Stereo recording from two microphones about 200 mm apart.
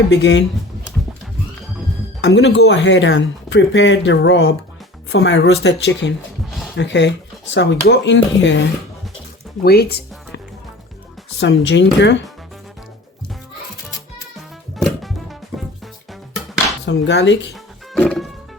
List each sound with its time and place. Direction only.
0.1 s speech: 70° left (ahead or behind)
2.2 s speech: 60° left (ahead or behind)
9.6 s music: 55° left (ahead or behind)
11.3 s speech: 65° left (ahead or behind)
14.8 s music: centre (ahead or behind)
16.8 s speech: 60° left (ahead or behind)
17.5 s music: 5° left (ahead or behind)